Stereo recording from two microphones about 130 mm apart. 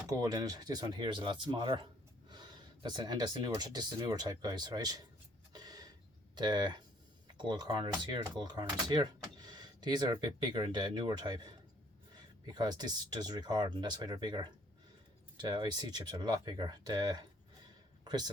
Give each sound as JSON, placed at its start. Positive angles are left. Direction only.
{"t": 0.1, "sound": "speech", "side_deg": -25}
{"t": 5.5, "sound": "a sound", "side_deg": -30}
{"t": 6.3, "sound": "a man's voice", "side_deg": -35}